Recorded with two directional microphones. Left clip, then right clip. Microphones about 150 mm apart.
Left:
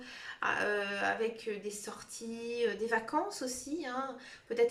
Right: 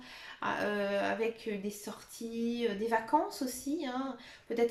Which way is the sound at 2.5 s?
30° right (ahead or behind).